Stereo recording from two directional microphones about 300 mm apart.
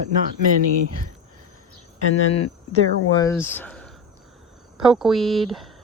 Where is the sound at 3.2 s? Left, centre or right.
Centre.